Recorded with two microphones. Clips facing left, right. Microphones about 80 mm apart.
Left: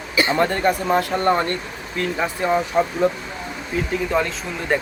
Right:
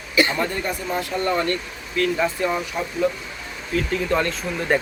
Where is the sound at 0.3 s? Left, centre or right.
Left.